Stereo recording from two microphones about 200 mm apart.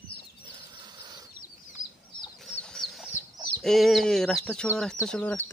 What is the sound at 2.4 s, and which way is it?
Chicken, 5° left (ahead or behind).